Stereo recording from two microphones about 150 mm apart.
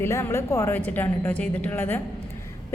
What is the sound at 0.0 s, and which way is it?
A woman's voice, 20° left (ahead or behind).